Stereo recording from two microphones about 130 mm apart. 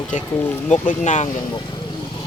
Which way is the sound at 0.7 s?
70° left (ahead or behind).